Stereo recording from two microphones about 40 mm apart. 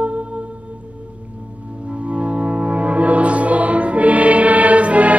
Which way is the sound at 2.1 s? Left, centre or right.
Right.